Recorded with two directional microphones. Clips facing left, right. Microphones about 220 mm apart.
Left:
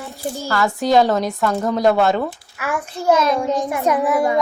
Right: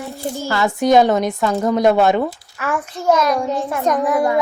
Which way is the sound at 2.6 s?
15° left (ahead or behind).